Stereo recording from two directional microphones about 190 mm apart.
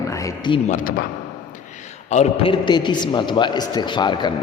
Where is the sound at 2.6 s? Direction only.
25° left (ahead or behind).